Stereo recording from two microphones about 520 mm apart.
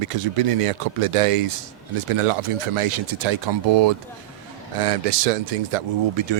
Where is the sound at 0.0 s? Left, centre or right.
Right.